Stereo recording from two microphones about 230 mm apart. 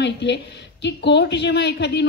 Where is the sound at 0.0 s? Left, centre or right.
Left.